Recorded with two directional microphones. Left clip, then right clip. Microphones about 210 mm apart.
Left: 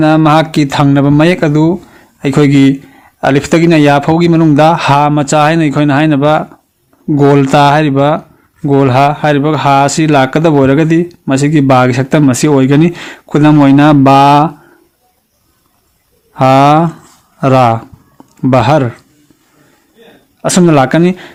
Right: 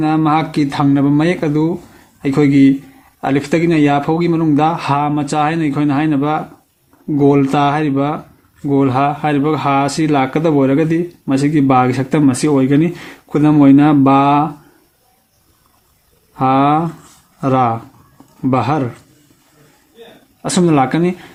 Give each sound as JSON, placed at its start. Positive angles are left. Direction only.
{"t": 0.0, "sound": "speech", "side_deg": 45}
{"t": 16.3, "sound": "speech", "side_deg": 50}
{"t": 20.4, "sound": "speech", "side_deg": 40}